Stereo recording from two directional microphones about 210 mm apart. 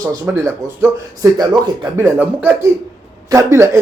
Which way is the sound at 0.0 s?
15° right (ahead or behind).